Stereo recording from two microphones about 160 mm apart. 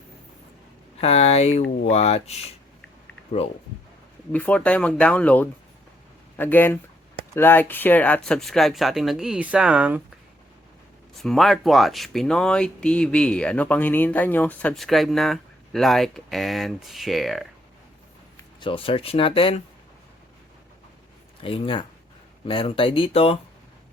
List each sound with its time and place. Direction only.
1.0 s speech: 40° left (ahead or behind)
4.3 s speech: 10° left (ahead or behind); by 10.0 s 5° right (ahead or behind)
11.1 s speech: centre (ahead or behind)
18.6 s speech: 35° left (ahead or behind)
21.4 s speech: 35° left (ahead or behind)